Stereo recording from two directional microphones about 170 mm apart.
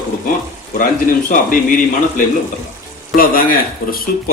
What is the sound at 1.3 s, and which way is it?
A man's voice, 55° left (ahead or behind).